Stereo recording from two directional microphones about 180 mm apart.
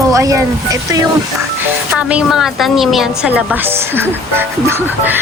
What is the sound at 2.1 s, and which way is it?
A woman's voice, 5° right (ahead or behind).